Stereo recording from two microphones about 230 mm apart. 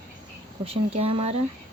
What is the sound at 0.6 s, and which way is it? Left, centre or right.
Speech, right.